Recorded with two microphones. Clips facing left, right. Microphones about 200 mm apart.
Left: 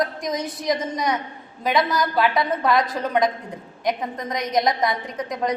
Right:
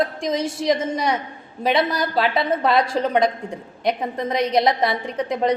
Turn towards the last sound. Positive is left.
turn(degrees=-25)  # may be behind; listen again after turning